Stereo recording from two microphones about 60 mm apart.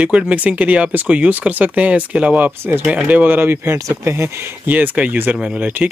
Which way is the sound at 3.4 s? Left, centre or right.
Right.